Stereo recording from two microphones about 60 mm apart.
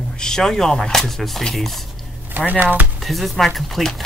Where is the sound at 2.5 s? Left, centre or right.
Right.